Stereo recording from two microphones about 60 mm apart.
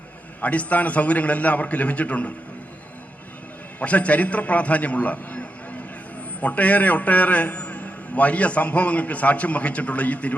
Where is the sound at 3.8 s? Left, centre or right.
Left.